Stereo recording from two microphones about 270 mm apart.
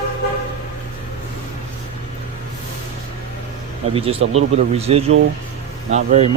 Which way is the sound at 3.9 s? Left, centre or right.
Right.